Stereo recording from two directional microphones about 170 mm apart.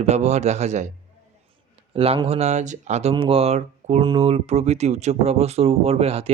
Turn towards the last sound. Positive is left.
turn(degrees=-35)  # may be behind; listen again after turning